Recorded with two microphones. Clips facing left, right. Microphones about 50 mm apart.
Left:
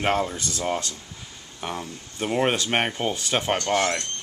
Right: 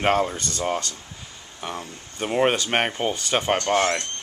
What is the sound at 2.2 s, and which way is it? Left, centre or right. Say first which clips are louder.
Speech: right 2 dB; centre.